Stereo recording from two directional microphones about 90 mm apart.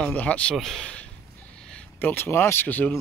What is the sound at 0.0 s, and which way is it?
Speech, 15° left (ahead or behind).